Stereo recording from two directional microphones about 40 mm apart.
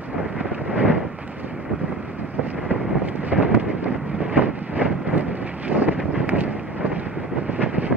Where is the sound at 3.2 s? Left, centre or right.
Right.